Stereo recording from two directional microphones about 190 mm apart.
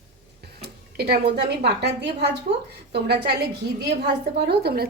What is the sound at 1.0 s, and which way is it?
Speech, 55° right (ahead or behind).